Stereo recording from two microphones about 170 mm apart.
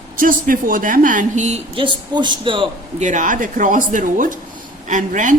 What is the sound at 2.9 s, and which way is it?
A woman's voice, 45° right (ahead or behind).